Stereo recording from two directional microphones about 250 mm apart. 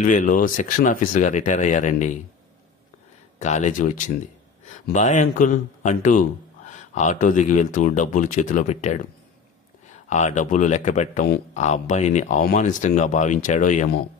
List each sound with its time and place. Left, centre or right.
0.0 s speech: left
3.3 s a man's voice: left
10.0 s a man's voice: left